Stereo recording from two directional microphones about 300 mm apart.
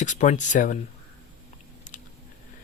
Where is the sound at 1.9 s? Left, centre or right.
Left.